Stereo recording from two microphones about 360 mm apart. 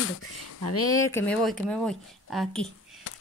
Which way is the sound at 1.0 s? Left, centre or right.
Centre.